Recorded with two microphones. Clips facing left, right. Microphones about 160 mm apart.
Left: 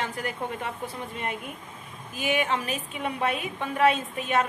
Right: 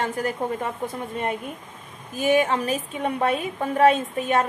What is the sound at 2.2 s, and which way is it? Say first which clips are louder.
A woman's voice: right 6 dB; 40° right (ahead or behind).